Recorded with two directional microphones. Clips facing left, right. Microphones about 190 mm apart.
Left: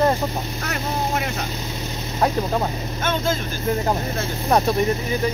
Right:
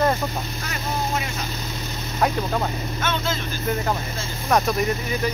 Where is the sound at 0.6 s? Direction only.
60° left (ahead or behind).